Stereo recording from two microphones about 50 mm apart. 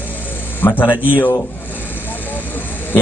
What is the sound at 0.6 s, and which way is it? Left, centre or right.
Speech, left.